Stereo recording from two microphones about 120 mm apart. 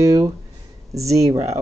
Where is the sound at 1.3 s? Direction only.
25° right (ahead or behind).